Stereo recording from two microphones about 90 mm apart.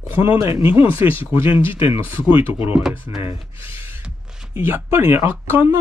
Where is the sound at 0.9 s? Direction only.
25° right (ahead or behind).